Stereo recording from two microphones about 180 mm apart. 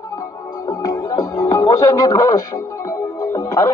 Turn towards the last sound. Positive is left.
turn(degrees=20)  # may be behind; listen again after turning